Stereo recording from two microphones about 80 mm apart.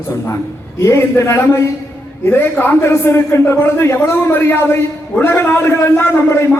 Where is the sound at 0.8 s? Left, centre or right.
Left.